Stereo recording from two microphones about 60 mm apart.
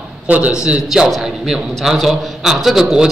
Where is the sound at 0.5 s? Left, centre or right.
Centre.